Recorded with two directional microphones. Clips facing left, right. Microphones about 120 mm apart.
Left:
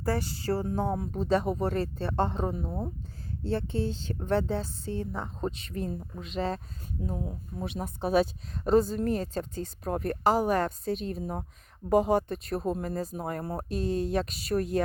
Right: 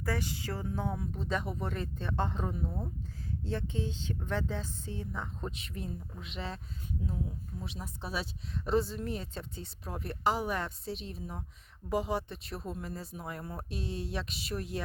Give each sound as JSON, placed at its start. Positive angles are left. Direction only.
{"t": 0.0, "sound": "speech", "side_deg": 35}